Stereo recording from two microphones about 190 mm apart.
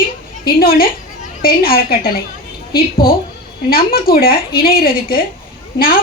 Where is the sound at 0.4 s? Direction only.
50° left (ahead or behind).